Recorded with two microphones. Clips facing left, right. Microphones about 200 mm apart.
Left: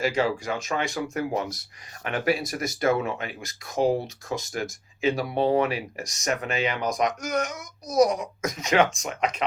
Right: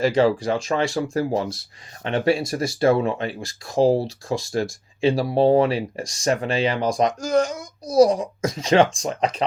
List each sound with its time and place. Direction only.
0.0 s speech: 35° right (ahead or behind)